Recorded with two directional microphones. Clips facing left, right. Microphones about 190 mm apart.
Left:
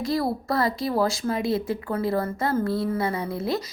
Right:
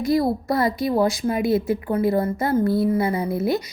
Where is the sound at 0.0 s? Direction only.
20° right (ahead or behind).